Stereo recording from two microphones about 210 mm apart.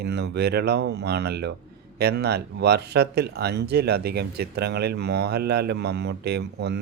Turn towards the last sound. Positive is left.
turn(degrees=-50)  # may be behind; listen again after turning